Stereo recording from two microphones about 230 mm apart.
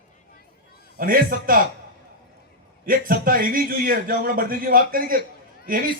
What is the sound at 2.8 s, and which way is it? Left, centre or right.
A man's voice, right.